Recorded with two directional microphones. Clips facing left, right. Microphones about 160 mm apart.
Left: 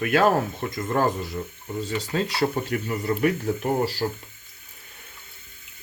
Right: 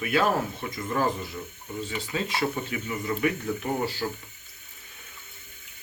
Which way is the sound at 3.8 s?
35° left (ahead or behind).